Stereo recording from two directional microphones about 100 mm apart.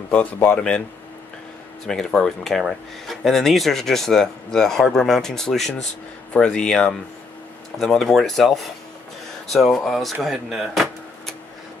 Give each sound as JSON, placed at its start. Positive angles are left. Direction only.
{"t": 0.1, "sound": "speech", "side_deg": 15}
{"t": 1.9, "sound": "speech", "side_deg": 5}
{"t": 10.2, "sound": "a sound", "side_deg": 0}